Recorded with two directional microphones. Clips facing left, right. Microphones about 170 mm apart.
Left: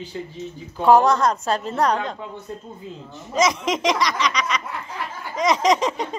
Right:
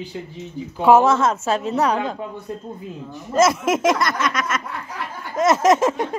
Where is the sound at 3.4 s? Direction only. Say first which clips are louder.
Right 4 dB; 5° right (ahead or behind).